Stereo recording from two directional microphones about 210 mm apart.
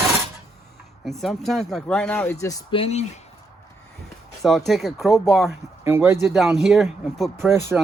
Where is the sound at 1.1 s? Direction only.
Centre (ahead or behind); by 3.0 s 30° left (ahead or behind).